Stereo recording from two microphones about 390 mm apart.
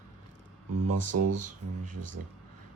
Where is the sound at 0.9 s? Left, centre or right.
Right.